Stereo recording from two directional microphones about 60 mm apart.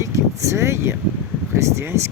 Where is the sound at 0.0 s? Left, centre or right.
Right.